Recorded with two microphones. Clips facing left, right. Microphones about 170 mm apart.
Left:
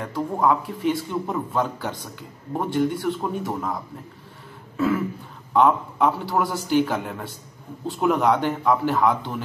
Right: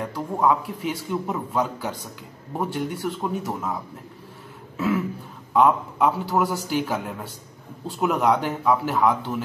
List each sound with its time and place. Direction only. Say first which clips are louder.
0.0 s a man's voice: even; 5° right (ahead or behind)